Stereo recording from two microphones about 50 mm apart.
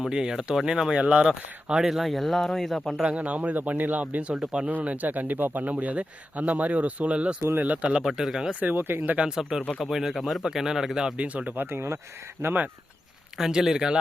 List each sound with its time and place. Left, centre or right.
0.1 s speech: centre
3.0 s a man's voice: right
4.3 s speech: centre
4.7 s a man's voice: right
8.0 s speech: centre
8.7 s speech: right
9.1 s speech: centre
11.2 s speech: right
11.5 s speech: right
13.4 s speech: centre